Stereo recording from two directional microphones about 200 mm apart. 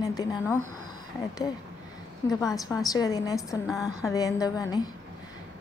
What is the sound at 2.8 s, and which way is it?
A woman's voice, 20° left (ahead or behind).